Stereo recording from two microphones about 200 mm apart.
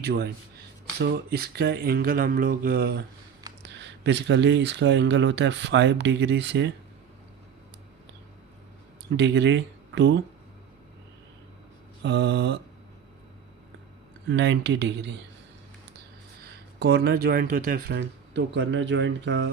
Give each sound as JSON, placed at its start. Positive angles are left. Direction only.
{"t": 0.0, "sound": "speech", "side_deg": -55}
{"t": 0.9, "sound": "mantra", "side_deg": -55}
{"t": 3.6, "sound": "speech", "side_deg": -60}
{"t": 9.1, "sound": "speech", "side_deg": -60}
{"t": 12.0, "sound": "speech", "side_deg": -60}
{"t": 14.3, "sound": "speech", "side_deg": -65}
{"t": 16.8, "sound": "speech", "side_deg": -55}